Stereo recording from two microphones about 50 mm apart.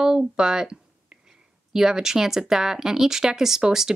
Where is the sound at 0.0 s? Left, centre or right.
Centre.